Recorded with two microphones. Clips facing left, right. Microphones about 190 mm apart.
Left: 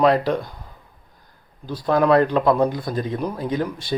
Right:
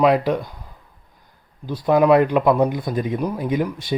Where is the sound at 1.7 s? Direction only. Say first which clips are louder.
Right 2 dB; 15° right (ahead or behind).